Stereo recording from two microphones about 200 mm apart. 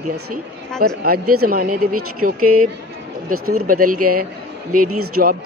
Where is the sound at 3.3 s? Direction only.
90° right.